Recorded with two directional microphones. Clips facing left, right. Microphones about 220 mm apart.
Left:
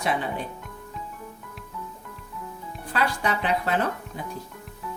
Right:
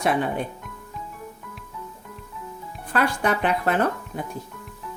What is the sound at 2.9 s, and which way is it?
Speech, 55° right (ahead or behind).